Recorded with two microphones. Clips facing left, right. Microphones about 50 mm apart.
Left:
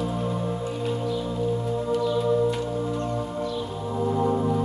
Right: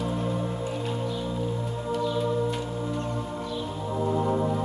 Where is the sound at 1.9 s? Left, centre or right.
Centre.